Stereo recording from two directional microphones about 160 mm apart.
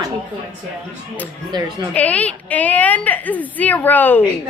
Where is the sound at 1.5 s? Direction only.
25° right (ahead or behind).